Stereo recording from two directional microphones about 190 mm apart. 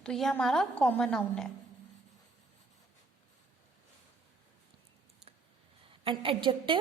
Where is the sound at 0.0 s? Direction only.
Centre (ahead or behind).